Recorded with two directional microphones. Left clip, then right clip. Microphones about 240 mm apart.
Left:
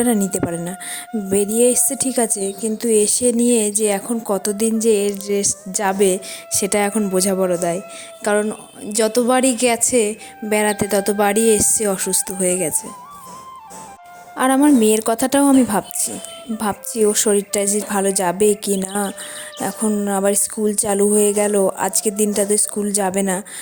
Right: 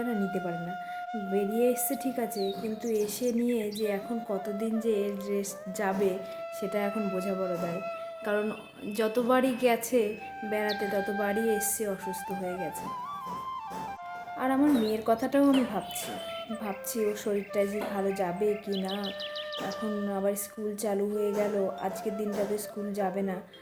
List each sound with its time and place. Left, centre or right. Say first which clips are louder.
1.3 s speech: left 11 dB; left
8.2 s speech: left 13 dB; left
14.3 s speech: left 12 dB; left